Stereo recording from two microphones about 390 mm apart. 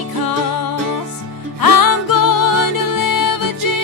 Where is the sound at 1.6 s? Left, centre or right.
Left.